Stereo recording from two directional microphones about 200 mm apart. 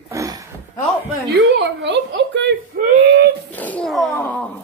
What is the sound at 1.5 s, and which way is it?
A woman's voice, 60° right (ahead or behind).